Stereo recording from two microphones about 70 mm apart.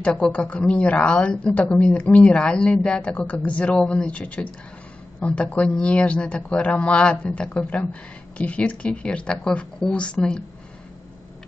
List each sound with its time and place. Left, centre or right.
0.0 s speech: centre